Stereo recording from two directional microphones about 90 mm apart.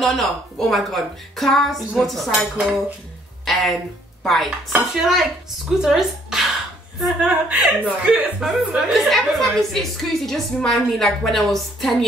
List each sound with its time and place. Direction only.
0.0 s a woman's voice: centre (ahead or behind)
3.4 s speech: centre (ahead or behind)
4.2 s chopping: centre (ahead or behind)
4.7 s a woman's voice: 5° right (ahead or behind)
7.2 s speech: 15° right (ahead or behind)
8.4 s a woman's voice: 5° right (ahead or behind)